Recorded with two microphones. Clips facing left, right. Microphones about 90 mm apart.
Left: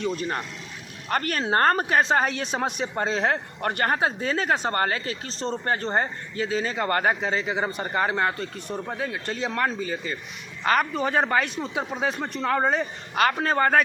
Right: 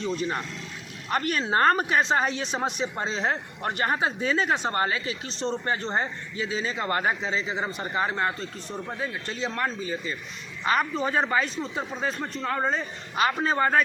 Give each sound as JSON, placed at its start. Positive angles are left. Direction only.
{"t": 1.2, "sound": "a man's voice", "side_deg": 55}